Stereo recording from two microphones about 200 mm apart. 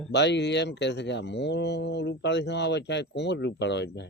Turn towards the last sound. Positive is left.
turn(degrees=60)  # may be behind; listen again after turning